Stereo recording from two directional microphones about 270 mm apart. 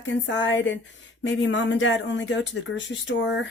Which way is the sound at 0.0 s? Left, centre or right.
Left.